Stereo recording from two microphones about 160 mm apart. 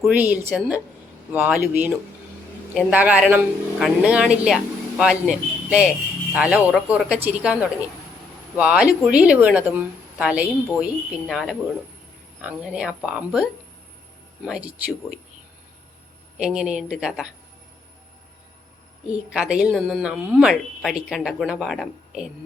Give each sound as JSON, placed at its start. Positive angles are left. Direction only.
{"t": 0.0, "sound": "a woman's voice", "side_deg": -10}
{"t": 16.4, "sound": "a woman's voice", "side_deg": -5}
{"t": 19.1, "sound": "a woman's voice", "side_deg": -5}